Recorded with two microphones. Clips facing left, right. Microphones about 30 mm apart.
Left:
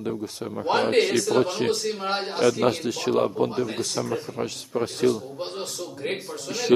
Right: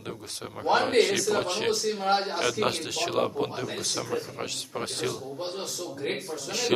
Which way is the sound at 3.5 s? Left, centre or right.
Left.